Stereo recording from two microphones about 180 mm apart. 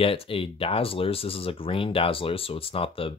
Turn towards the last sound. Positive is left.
turn(degrees=30)  # may be behind; listen again after turning